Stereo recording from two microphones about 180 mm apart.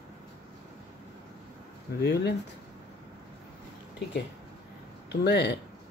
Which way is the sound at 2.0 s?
65° left (ahead or behind).